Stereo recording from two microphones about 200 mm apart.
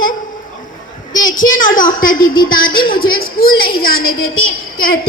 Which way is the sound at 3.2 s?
90° left.